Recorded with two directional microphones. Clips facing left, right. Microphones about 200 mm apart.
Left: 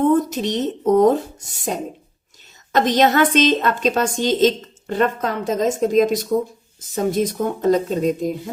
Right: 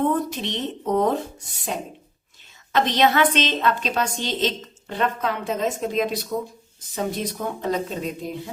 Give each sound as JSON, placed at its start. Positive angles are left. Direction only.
{"t": 0.0, "sound": "speech", "side_deg": 45}
{"t": 2.7, "sound": "a woman's voice", "side_deg": 45}